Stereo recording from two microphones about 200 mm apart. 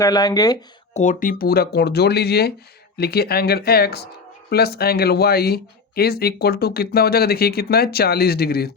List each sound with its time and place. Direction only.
0.0 s speech: 20° left (ahead or behind)
0.9 s speech: 40° left (ahead or behind)